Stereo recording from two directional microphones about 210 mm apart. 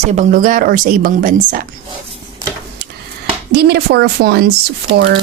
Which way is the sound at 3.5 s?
50° right (ahead or behind).